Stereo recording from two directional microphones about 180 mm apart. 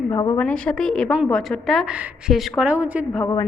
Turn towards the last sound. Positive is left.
turn(degrees=20)  # may be behind; listen again after turning